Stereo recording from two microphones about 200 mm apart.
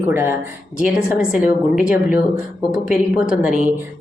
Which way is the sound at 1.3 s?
5° right (ahead or behind).